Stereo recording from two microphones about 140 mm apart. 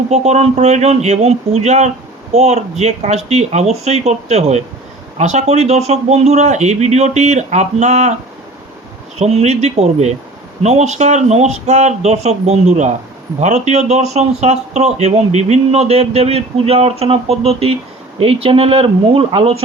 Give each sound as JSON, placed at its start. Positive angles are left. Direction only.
{"t": 0.1, "sound": "speech", "side_deg": -50}
{"t": 9.1, "sound": "speech", "side_deg": -50}